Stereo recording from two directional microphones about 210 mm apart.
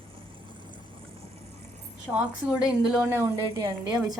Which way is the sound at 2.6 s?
5° right (ahead or behind).